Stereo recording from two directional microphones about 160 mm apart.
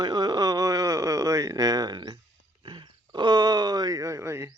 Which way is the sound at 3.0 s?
30° right (ahead or behind).